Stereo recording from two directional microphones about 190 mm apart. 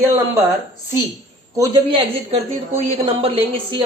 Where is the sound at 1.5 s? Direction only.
20° right (ahead or behind).